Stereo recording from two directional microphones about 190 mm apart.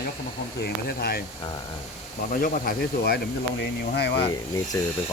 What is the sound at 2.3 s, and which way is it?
Speech, 45° left (ahead or behind).